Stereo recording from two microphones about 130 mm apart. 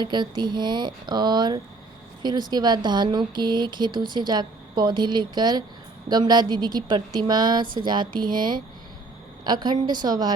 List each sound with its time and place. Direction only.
0.0 s speech: 35° right (ahead or behind)